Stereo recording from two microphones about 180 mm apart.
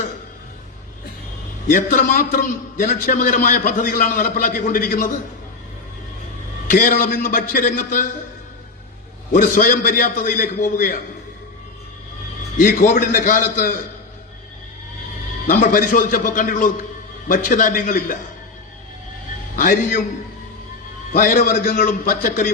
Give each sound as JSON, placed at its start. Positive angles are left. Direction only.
{"t": 1.7, "sound": "a man's voice", "side_deg": 45}
{"t": 6.7, "sound": "a man's voice", "side_deg": 50}
{"t": 9.3, "sound": "a man's voice", "side_deg": 45}
{"t": 12.5, "sound": "a man's voice", "side_deg": 45}
{"t": 15.4, "sound": "a man's voice", "side_deg": 50}
{"t": 19.5, "sound": "a man's voice", "side_deg": 45}
{"t": 21.2, "sound": "a man's voice", "side_deg": 50}